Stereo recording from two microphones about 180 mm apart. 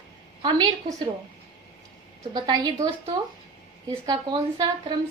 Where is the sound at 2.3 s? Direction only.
25° right (ahead or behind).